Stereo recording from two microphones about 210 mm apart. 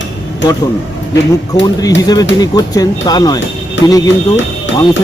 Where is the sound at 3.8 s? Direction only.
65° left (ahead or behind).